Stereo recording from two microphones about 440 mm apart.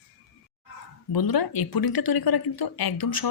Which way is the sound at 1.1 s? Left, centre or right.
Left.